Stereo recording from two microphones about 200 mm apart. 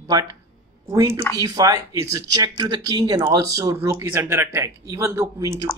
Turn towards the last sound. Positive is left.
turn(degrees=-15)  # may be behind; listen again after turning